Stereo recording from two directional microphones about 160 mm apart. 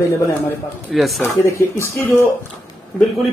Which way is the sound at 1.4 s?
15° left (ahead or behind).